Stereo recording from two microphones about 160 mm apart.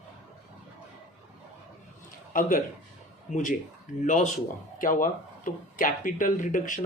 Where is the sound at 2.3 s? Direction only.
60° left (ahead or behind).